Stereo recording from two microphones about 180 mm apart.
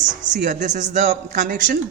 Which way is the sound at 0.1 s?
45° right (ahead or behind).